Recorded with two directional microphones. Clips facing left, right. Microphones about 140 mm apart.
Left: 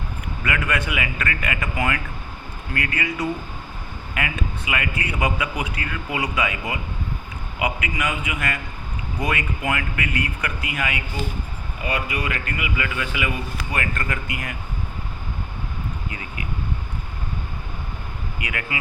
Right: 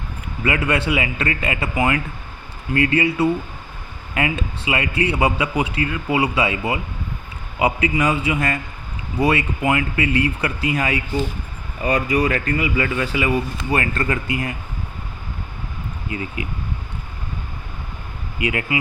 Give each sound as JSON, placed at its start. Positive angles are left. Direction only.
{"t": 0.4, "sound": "a man's voice", "side_deg": -30}
{"t": 16.1, "sound": "a man's voice", "side_deg": -25}
{"t": 18.3, "sound": "a man's voice", "side_deg": -25}